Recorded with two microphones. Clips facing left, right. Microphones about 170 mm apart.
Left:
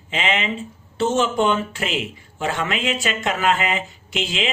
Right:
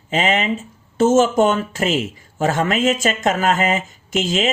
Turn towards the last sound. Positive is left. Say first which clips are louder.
# right 5 dB
turn(degrees=-45)  # may be behind; listen again after turning